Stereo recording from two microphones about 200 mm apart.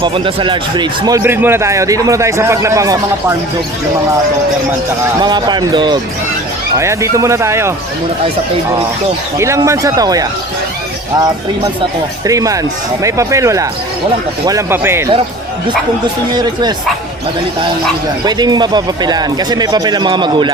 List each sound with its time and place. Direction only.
0.0 s a man's voice: 25° right (ahead or behind)
5.2 s a man's voice: 20° right (ahead or behind)
9.4 s a man's voice: 15° right (ahead or behind)
12.2 s a man's voice: 15° right (ahead or behind)
16.3 s speech: 20° right (ahead or behind)
18.3 s speech: 20° right (ahead or behind)